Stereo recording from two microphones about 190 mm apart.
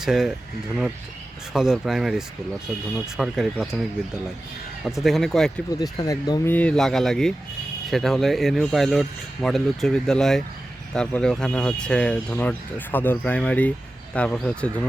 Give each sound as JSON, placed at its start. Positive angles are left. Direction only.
{"t": 0.0, "sound": "speech", "side_deg": -5}
{"t": 1.5, "sound": "speech", "side_deg": -5}
{"t": 4.9, "sound": "speech", "side_deg": 0}
{"t": 5.8, "sound": "speech", "side_deg": 20}
{"t": 6.5, "sound": "speech", "side_deg": 5}